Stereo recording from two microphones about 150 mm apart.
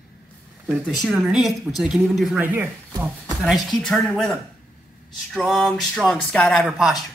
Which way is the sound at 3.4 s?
Centre (ahead or behind).